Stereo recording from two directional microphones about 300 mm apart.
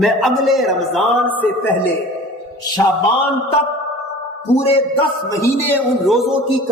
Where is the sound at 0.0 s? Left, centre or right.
Centre.